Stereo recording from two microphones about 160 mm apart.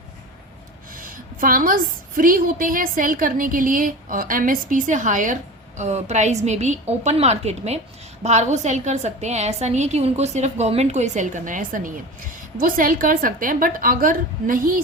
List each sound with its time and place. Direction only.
0.9 s a woman's voice: 60° right (ahead or behind)